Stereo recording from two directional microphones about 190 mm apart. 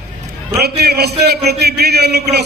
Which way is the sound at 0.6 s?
55° right (ahead or behind).